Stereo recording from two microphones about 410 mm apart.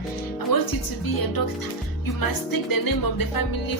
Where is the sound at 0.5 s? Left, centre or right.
Left.